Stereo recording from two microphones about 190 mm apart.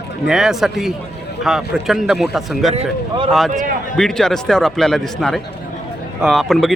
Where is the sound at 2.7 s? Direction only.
30° right (ahead or behind).